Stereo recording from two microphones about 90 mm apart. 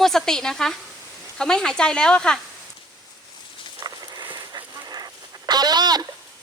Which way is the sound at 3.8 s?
50° right (ahead or behind).